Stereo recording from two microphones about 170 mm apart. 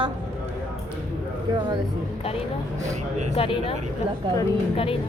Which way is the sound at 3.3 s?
35° left (ahead or behind).